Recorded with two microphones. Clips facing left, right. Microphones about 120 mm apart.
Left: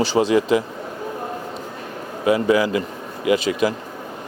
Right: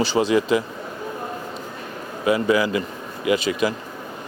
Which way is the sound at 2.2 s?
50° left (ahead or behind).